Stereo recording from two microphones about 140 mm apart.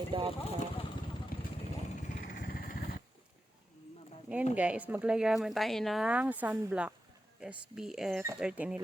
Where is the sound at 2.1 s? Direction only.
80° left.